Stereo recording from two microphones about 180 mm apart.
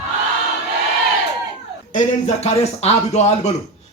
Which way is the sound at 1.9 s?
40° left (ahead or behind).